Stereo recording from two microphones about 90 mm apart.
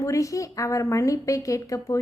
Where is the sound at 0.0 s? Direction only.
35° left (ahead or behind).